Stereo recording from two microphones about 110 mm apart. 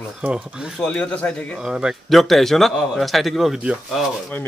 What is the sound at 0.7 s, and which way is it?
Speech, 10° left (ahead or behind).